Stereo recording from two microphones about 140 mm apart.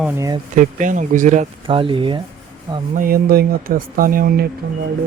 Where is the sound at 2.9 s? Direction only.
85° right.